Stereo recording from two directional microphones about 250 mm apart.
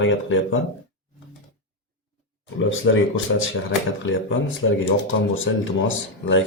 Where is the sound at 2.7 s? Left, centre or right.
Left.